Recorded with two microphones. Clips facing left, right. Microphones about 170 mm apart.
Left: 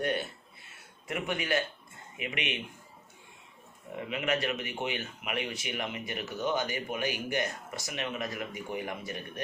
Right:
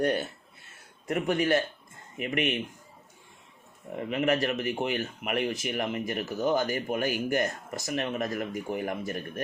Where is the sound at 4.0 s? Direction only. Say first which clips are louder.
Right 5 dB; 45° right (ahead or behind).